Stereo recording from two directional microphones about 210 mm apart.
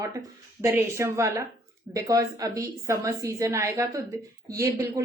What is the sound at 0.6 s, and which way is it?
A woman's voice, 10° right (ahead or behind).